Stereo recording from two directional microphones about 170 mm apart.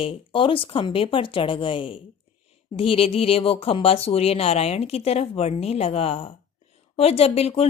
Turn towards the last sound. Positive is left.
turn(degrees=35)  # may be behind; listen again after turning